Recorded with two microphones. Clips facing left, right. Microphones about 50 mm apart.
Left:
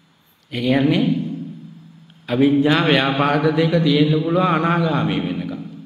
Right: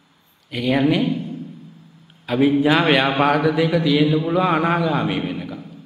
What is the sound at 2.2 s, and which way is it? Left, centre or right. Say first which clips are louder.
A man's voice: left 1 dB; centre.